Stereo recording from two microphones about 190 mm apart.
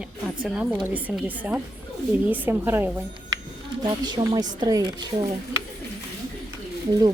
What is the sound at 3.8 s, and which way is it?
Speech, 20° right (ahead or behind).